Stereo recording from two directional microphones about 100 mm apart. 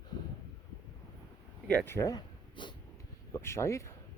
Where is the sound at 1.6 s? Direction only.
20° left (ahead or behind).